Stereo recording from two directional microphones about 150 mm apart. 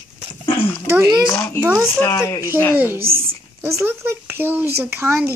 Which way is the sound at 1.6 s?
10° right (ahead or behind).